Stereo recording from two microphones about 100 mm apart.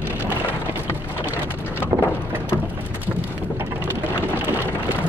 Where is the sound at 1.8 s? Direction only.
20° left (ahead or behind).